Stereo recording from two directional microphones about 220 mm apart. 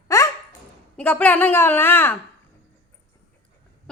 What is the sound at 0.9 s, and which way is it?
A woman's voice, 10° left (ahead or behind).